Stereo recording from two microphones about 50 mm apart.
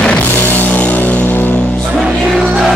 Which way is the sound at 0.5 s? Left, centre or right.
Left.